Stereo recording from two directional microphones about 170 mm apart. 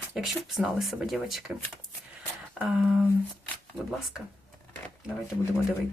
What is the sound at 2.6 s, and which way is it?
Speech, centre (ahead or behind).